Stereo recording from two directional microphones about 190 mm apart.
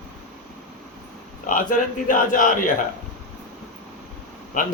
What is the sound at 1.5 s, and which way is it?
A man's voice, 45° left (ahead or behind).